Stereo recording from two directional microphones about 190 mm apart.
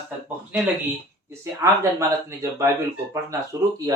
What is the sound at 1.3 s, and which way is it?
Speech, 15° right (ahead or behind).